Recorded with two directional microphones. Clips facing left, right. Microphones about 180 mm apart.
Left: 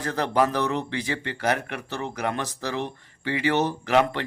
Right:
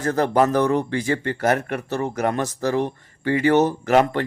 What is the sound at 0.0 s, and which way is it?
A man's voice, 45° right (ahead or behind).